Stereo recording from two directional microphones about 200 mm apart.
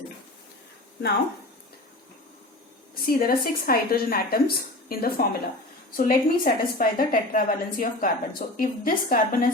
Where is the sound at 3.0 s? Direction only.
50° left (ahead or behind).